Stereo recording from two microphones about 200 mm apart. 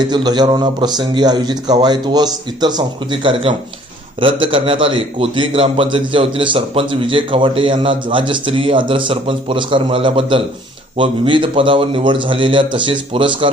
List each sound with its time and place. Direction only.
0.1 s a man's voice: 20° right (ahead or behind)